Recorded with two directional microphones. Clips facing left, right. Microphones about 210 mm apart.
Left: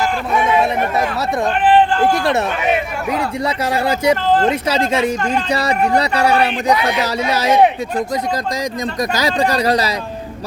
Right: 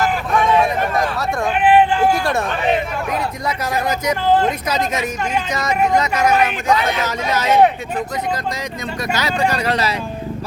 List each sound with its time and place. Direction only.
0.3 s a sound: 10° left (ahead or behind)
1.5 s speech: 5° right (ahead or behind)
3.4 s speech: 30° left (ahead or behind)
4.3 s speech: 10° right (ahead or behind)
4.7 s speech: 30° left (ahead or behind)
6.7 s speech: 15° left (ahead or behind)
9.0 s speech: 35° left (ahead or behind)